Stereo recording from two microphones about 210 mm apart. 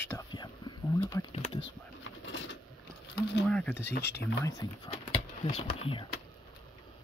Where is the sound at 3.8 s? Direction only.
55° left (ahead or behind).